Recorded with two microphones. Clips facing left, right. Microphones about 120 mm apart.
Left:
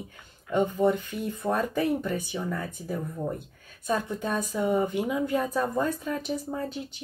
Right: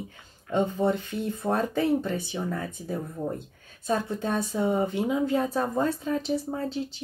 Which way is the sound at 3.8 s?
30° right (ahead or behind).